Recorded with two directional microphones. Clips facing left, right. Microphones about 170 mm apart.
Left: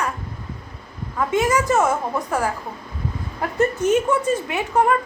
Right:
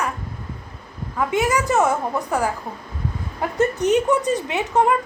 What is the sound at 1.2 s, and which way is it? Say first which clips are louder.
A woman's voice: left 1 dB; 15° right (ahead or behind).